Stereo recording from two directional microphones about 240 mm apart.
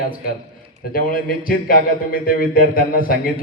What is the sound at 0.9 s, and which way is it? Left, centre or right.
A man's voice, left.